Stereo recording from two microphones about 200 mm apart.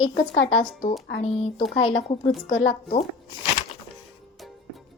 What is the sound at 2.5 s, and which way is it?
Speech, 40° left (ahead or behind).